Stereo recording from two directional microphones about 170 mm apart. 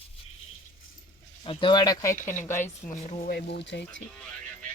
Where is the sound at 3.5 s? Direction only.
90° left.